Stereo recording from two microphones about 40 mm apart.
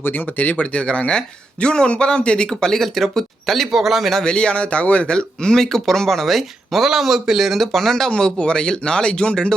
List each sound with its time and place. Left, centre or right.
0.0 s speech: left
2.5 s speech: centre
3.7 s a man's voice: centre
4.1 s speech: centre
8.1 s speech: left